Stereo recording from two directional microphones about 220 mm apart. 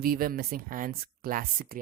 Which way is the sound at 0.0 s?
40° right (ahead or behind).